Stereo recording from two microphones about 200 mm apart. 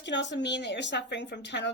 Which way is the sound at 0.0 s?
60° left (ahead or behind).